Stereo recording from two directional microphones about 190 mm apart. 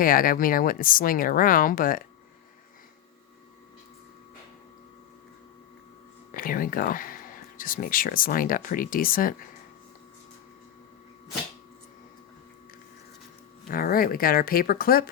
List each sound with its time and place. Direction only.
0.0 s speech: 45° left (ahead or behind)
6.3 s speech: 45° left (ahead or behind)
13.7 s speech: 50° left (ahead or behind)